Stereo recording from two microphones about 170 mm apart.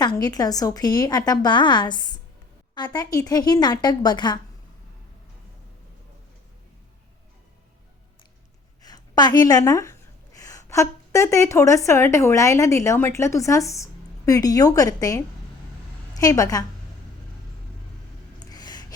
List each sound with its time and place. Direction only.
0.0 s a woman's voice: 25° left (ahead or behind)
8.8 s a woman's voice: 25° left (ahead or behind)
18.3 s gasp: 25° left (ahead or behind)